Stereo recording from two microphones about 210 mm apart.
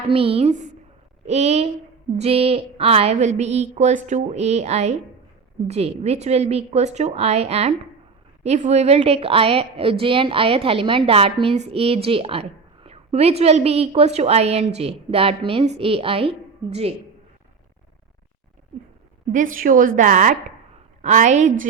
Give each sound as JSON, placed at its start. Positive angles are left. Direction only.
{"t": 0.1, "sound": "a woman's voice", "side_deg": -25}
{"t": 19.3, "sound": "a woman's voice", "side_deg": -40}